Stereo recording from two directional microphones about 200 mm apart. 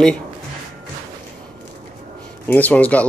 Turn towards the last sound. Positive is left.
turn(degrees=5)  # may be behind; listen again after turning